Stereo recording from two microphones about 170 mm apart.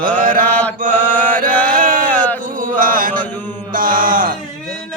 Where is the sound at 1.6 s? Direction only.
50° right (ahead or behind).